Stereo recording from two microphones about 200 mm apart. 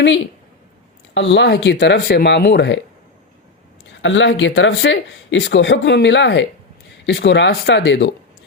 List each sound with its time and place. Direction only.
1.1 s speech: 60° left (ahead or behind)
4.0 s speech: 65° left (ahead or behind)